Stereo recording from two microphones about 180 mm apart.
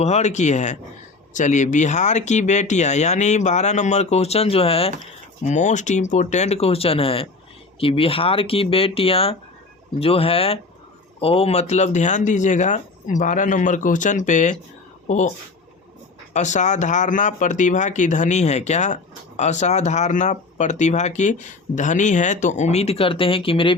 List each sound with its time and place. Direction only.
0.0 s speech: 40° left (ahead or behind)
16.3 s speech: 40° left (ahead or behind)